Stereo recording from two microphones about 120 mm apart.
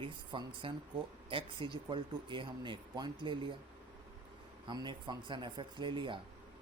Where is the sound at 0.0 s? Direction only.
45° right (ahead or behind).